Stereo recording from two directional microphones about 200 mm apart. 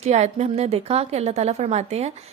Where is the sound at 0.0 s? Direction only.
35° right (ahead or behind).